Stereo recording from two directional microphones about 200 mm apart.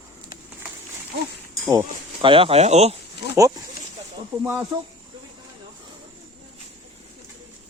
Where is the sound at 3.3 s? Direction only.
15° right (ahead or behind).